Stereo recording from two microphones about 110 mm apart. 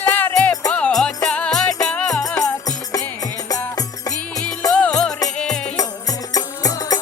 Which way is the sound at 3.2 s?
35° left (ahead or behind).